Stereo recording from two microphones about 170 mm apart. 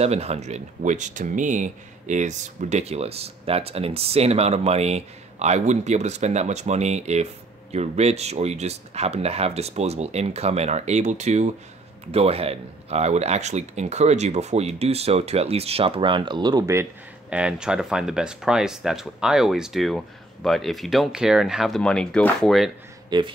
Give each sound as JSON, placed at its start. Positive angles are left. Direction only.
{"t": 0.0, "sound": "speech", "side_deg": -35}
{"t": 17.3, "sound": "speech", "side_deg": -5}
{"t": 23.0, "sound": "speech", "side_deg": -25}